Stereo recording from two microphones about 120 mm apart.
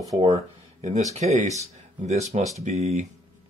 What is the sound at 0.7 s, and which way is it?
Speech, 65° right (ahead or behind).